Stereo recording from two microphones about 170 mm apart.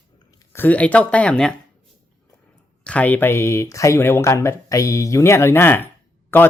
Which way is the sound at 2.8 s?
10° left (ahead or behind).